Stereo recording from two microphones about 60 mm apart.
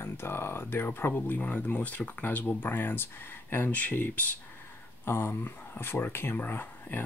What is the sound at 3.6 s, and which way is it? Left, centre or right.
Speech, left.